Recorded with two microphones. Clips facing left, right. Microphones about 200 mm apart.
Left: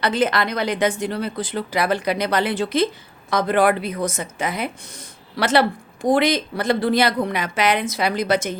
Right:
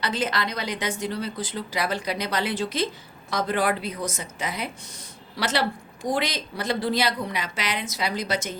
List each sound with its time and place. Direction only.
0.0 s speech: 60° left (ahead or behind)